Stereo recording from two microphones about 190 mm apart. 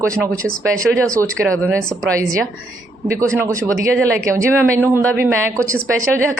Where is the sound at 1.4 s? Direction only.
15° right (ahead or behind).